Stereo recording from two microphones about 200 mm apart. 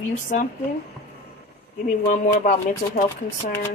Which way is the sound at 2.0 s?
40° left (ahead or behind).